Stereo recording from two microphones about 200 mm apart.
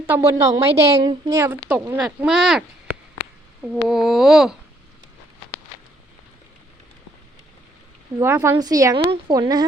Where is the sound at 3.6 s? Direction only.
Centre (ahead or behind).